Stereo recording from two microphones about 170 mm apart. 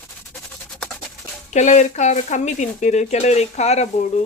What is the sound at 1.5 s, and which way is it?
Speech, 45° left (ahead or behind).